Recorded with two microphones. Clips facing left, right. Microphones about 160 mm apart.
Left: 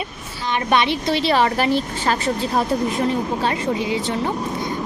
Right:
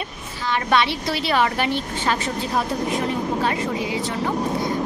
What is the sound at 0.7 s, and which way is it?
Speech, 20° left (ahead or behind).